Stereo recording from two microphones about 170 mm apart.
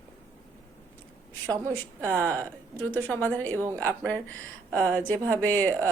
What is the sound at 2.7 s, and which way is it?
Speech, 10° left (ahead or behind).